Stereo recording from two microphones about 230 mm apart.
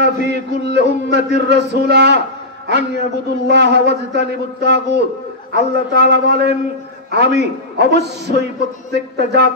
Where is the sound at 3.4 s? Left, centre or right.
Right.